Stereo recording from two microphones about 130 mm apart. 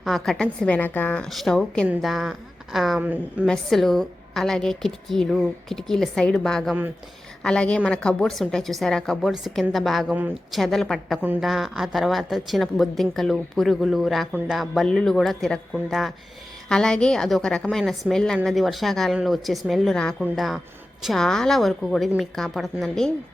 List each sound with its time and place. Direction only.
0.0 s a woman's voice: centre (ahead or behind)
3.0 s a woman's voice: 10° right (ahead or behind)
3.4 s a woman's voice: 5° left (ahead or behind)